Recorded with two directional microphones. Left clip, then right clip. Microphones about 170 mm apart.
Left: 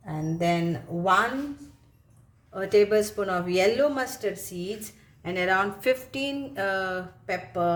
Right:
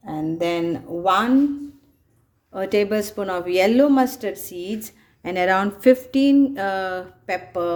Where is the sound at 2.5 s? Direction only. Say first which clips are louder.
Right 1 dB; 50° right (ahead or behind).